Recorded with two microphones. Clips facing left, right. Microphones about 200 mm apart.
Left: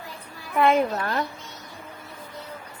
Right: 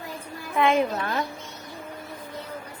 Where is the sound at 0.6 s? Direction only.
Centre (ahead or behind).